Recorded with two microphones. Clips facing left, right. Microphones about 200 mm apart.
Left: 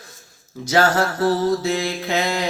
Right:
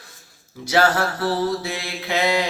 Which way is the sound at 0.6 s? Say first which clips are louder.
Left 1 dB; 45° left (ahead or behind).